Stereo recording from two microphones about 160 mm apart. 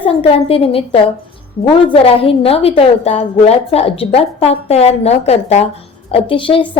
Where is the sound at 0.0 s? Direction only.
35° left (ahead or behind).